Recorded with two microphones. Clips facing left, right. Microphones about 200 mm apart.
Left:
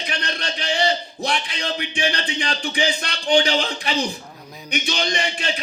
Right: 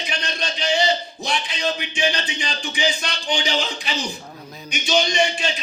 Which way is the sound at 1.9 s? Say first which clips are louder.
Even; 60° left (ahead or behind).